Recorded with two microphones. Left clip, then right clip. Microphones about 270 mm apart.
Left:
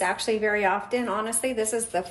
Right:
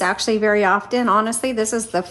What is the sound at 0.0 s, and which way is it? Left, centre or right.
A woman's voice, right.